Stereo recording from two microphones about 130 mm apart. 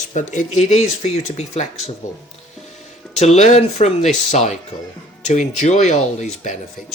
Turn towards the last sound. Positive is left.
turn(degrees=70)  # may be behind; listen again after turning